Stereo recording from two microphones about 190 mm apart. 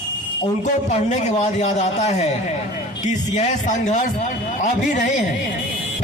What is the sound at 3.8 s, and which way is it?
A man's voice, 40° left (ahead or behind).